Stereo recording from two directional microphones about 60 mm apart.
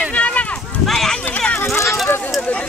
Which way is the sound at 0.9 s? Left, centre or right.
Centre.